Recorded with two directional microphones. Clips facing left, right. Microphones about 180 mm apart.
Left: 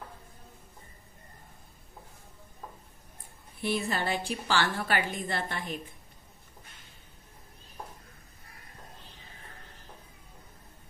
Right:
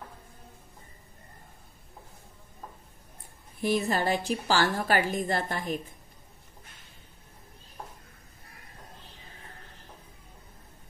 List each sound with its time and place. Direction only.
3.5 s a woman's voice: 40° right (ahead or behind)